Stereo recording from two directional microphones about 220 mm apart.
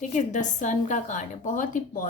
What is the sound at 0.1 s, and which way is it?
A woman's voice, 35° left (ahead or behind).